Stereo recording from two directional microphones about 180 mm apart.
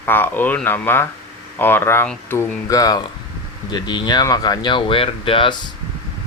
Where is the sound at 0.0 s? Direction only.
10° left (ahead or behind).